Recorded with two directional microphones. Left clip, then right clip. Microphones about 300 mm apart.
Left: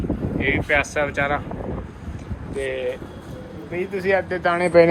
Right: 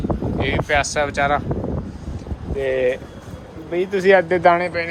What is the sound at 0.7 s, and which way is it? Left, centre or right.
Speech, centre.